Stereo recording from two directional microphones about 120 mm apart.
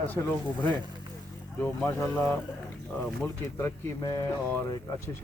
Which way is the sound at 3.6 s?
25° left (ahead or behind).